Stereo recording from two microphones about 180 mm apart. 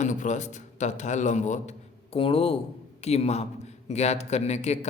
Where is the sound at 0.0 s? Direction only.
45° left (ahead or behind).